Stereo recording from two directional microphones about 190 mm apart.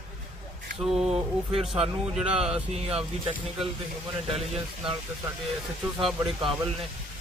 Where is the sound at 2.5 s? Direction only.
30° right (ahead or behind).